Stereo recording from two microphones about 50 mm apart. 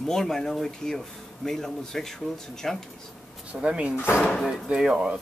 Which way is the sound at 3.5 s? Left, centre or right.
Right.